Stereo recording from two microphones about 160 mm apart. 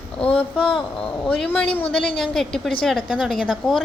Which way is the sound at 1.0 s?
5° left (ahead or behind).